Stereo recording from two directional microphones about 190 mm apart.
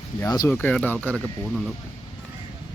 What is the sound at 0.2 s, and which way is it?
Speech, 15° left (ahead or behind).